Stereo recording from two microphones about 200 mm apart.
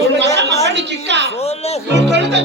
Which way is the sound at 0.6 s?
60° right (ahead or behind).